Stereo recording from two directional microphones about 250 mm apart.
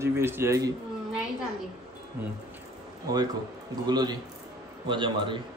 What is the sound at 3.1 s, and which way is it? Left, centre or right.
A man's voice, centre.